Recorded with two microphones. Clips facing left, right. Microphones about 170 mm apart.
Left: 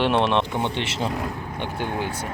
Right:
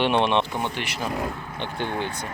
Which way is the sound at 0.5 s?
25° left (ahead or behind).